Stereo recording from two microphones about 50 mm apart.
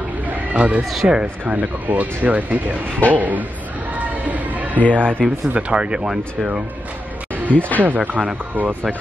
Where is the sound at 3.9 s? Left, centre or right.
Right.